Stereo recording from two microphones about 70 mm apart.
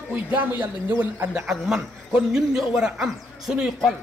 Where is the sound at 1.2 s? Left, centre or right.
Centre.